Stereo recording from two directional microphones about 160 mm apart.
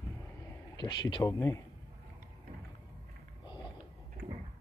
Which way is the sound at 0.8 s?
25° left (ahead or behind).